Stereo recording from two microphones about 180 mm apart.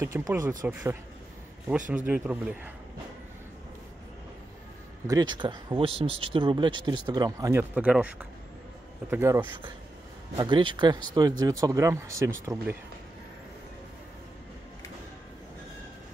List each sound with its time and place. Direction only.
0.0 s speech: 15° right (ahead or behind)
2.0 s speech: 10° right (ahead or behind)
5.0 s speech: 20° right (ahead or behind)
7.7 s speech: 5° right (ahead or behind)
10.3 s speech: 25° right (ahead or behind)